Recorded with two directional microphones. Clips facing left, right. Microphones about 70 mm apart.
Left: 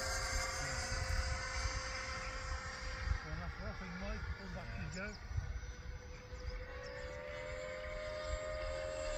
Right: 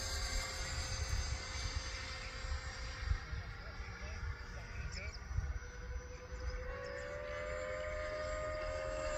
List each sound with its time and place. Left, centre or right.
0.0 s vehicle: centre
6.9 s vehicle: centre